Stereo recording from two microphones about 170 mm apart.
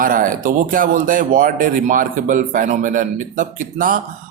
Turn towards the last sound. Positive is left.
turn(degrees=-50)  # may be behind; listen again after turning